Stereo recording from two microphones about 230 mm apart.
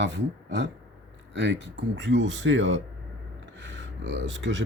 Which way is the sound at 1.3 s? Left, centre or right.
Right.